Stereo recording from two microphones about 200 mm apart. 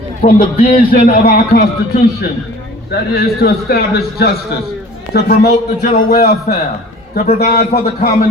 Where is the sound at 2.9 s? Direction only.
50° left (ahead or behind).